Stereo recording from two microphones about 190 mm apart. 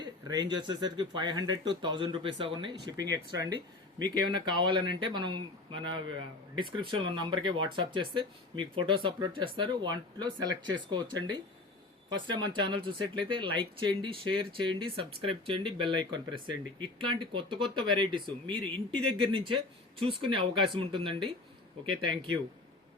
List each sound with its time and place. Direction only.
0.0 s speech: 20° right (ahead or behind)
17.2 s speech: 25° right (ahead or behind)